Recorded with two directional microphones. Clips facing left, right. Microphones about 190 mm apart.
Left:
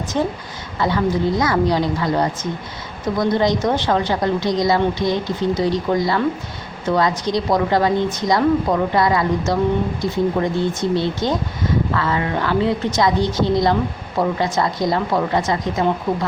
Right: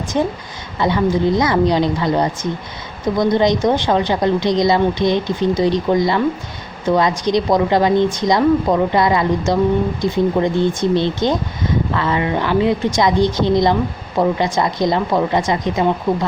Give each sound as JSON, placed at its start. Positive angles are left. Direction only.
{"t": 0.1, "sound": "a woman's voice", "side_deg": -15}